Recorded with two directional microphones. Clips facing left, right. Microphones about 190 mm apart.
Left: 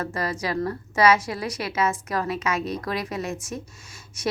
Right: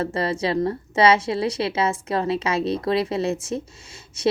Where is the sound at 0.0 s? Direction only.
25° right (ahead or behind).